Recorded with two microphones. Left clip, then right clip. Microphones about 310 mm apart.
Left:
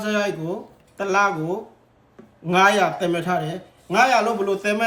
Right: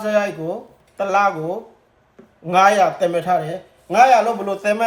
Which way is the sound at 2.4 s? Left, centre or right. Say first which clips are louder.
Right 3 dB; centre.